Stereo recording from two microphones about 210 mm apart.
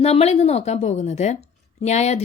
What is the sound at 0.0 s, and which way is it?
A woman's voice, 30° left (ahead or behind).